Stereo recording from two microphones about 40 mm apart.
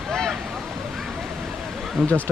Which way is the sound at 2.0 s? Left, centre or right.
Centre.